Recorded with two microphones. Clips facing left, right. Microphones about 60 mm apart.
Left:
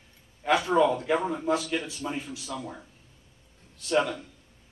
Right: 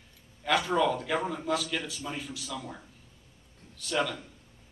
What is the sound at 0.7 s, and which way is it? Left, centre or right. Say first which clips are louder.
A man's voice: left 4 dB; left.